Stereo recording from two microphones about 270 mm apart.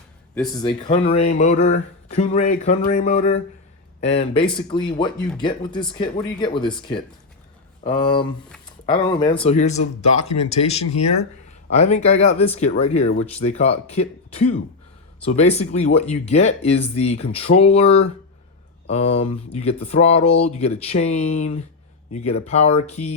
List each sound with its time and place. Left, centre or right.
0.5 s speech: centre